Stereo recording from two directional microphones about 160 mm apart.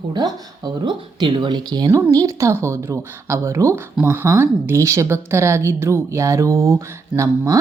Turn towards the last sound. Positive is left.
turn(degrees=-20)  # may be behind; listen again after turning